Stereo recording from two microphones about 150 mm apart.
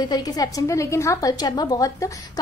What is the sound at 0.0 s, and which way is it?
A woman's voice, 25° left (ahead or behind).